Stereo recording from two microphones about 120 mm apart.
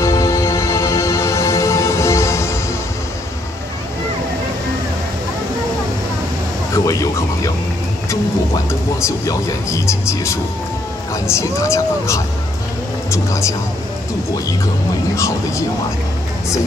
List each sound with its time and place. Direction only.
0.0 s music: 25° left (ahead or behind)
6.7 s music: 30° left (ahead or behind)
8.6 s speech: 25° left (ahead or behind)
15.1 s speech: 25° left (ahead or behind)